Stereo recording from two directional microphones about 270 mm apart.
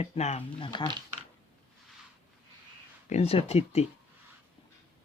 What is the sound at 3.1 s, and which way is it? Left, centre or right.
Speech, left.